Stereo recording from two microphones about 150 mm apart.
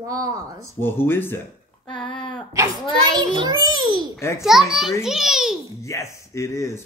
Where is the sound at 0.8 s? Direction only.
15° left (ahead or behind).